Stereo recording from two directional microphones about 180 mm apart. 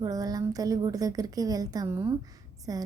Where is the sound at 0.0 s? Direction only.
20° right (ahead or behind).